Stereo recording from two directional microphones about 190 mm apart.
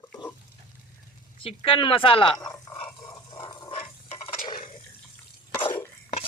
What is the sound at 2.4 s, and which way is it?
Dog, 15° left (ahead or behind).